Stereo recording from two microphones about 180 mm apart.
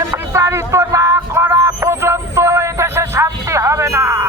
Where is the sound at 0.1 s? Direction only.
15° right (ahead or behind).